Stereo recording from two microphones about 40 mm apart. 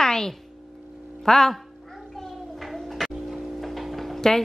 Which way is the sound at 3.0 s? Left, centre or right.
Centre.